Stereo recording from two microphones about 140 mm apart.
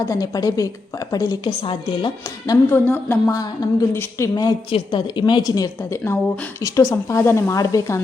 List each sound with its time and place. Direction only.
0.0 s a woman's voice: 25° left (ahead or behind)
2.2 s speech: 20° left (ahead or behind)
3.3 s a woman's voice: 25° left (ahead or behind)
4.7 s a woman's voice: 35° left (ahead or behind)